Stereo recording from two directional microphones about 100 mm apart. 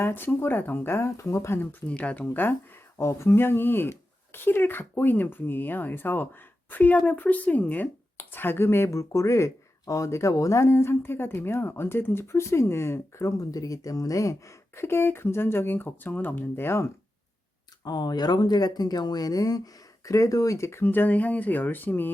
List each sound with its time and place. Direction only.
0.0 s speech: 20° left (ahead or behind)
1.9 s speech: 15° left (ahead or behind)
17.8 s speech: 40° left (ahead or behind); by 22.1 s 20° left (ahead or behind)